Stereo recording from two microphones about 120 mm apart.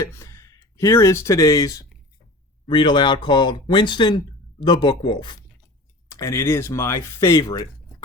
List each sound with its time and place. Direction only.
0.0 s speech: 25° left (ahead or behind)
2.6 s speech: 40° left (ahead or behind)
6.1 s speech: 25° left (ahead or behind)